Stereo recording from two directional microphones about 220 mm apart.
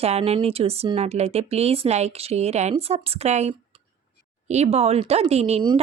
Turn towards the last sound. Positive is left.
turn(degrees=-25)  # may be behind; listen again after turning